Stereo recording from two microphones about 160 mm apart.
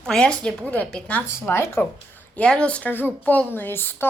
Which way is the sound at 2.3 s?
5° left (ahead or behind).